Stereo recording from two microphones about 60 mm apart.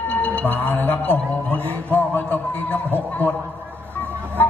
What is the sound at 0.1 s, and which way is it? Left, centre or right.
Speech, left.